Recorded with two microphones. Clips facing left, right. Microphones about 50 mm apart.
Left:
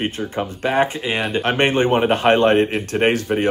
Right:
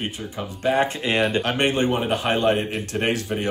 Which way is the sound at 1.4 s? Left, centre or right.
Left.